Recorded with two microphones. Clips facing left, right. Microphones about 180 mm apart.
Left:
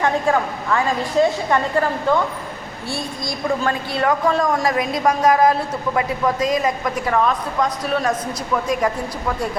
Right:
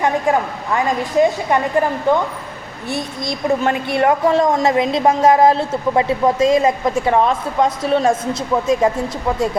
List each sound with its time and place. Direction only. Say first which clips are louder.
0.0 s a woman's voice: right 2 dB; 15° right (ahead or behind)